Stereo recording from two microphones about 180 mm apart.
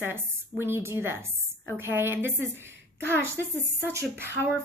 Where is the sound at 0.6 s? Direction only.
15° right (ahead or behind).